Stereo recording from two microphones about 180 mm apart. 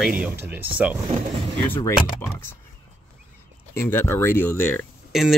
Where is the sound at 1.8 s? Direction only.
15° left (ahead or behind).